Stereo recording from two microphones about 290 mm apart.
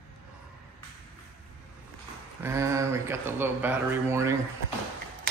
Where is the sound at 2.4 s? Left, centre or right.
Centre.